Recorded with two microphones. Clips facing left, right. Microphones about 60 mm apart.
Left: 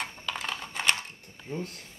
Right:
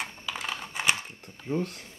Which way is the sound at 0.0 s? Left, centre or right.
Centre.